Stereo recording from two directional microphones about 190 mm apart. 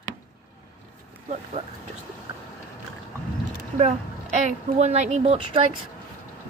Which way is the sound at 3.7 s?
40° right (ahead or behind).